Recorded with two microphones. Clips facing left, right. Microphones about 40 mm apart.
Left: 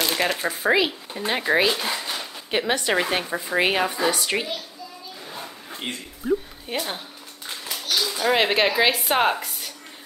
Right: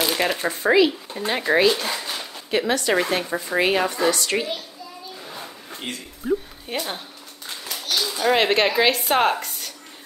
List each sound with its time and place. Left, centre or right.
0.0 s speech: centre
2.5 s speech: centre
5.2 s a sound: centre
5.9 s speech: left
6.2 s speech: centre